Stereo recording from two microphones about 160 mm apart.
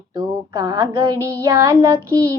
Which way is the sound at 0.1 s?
25° right (ahead or behind).